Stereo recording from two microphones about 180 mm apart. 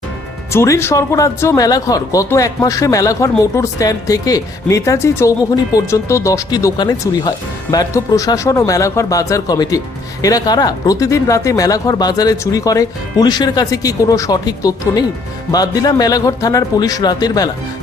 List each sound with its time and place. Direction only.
0.5 s speech: 15° left (ahead or behind)